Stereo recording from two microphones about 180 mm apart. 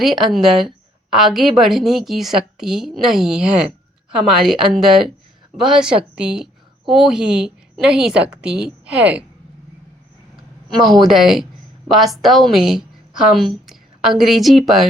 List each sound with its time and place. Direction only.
0.0 s a woman's voice: centre (ahead or behind)
8.4 s speech: 65° right (ahead or behind)
8.9 s speech: 5° right (ahead or behind)
11.0 s a woman's voice: centre (ahead or behind)